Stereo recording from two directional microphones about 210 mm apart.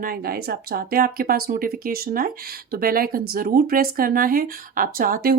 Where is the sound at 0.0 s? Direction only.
45° right (ahead or behind).